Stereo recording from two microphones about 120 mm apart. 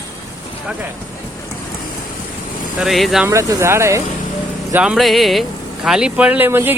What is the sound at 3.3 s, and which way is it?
Speech, 25° right (ahead or behind).